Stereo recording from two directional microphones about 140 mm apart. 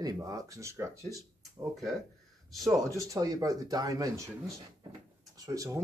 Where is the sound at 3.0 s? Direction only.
25° right (ahead or behind).